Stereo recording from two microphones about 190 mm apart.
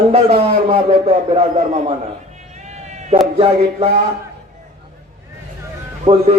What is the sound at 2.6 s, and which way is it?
Sheep, 35° right (ahead or behind).